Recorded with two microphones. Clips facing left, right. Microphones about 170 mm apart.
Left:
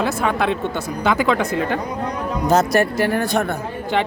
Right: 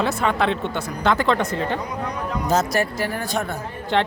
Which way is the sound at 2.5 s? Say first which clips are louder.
Left 5 dB; 60° left (ahead or behind).